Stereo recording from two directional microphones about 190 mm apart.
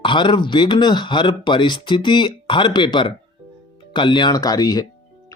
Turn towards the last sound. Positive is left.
turn(degrees=20)  # may be behind; listen again after turning